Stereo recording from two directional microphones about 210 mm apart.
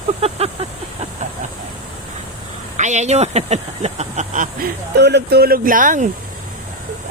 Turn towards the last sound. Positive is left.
turn(degrees=-40)  # may be behind; listen again after turning